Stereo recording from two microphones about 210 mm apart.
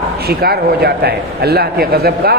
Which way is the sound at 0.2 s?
50° right (ahead or behind).